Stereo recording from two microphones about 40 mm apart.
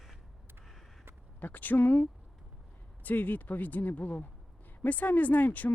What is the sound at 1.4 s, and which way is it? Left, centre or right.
Speech, left.